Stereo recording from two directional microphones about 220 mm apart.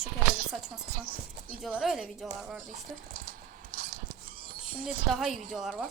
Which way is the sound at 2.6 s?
35° right (ahead or behind).